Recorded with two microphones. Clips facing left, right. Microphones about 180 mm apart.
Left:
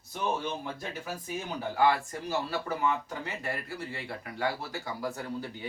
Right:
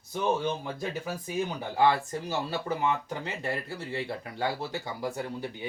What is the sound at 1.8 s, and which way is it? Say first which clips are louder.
Speech: right 2 dB; 25° right (ahead or behind).